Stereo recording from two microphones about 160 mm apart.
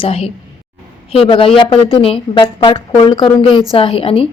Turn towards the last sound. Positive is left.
turn(degrees=35)  # may be behind; listen again after turning